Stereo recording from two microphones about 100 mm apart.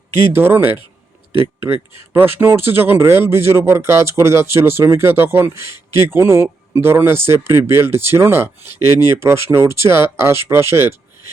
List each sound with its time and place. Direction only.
0.3 s speech: 25° right (ahead or behind)